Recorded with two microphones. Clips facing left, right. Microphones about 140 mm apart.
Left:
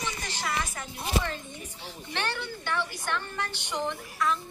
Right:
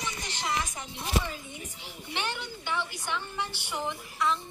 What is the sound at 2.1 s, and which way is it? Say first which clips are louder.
A woman's voice: left 2 dB; 15° right (ahead or behind).